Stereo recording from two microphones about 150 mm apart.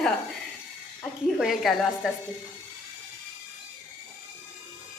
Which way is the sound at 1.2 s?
Centre (ahead or behind).